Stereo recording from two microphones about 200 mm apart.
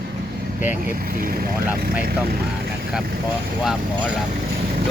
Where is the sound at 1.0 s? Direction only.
45° right (ahead or behind).